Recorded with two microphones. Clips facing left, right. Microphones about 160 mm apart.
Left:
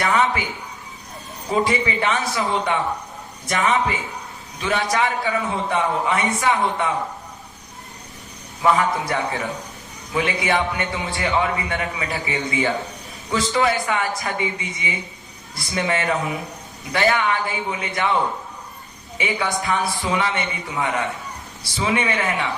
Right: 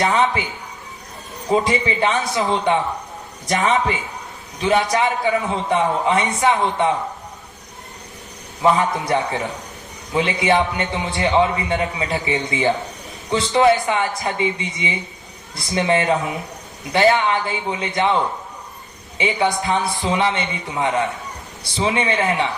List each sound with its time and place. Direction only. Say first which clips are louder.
0.0 s a man's voice: right 2 dB; 25° right (ahead or behind)
1.6 s a man's voice: right 2 dB; 25° right (ahead or behind)
8.6 s a man's voice: right 2 dB; 25° right (ahead or behind)
19.1 s a man's voice: right 4 dB; 25° right (ahead or behind)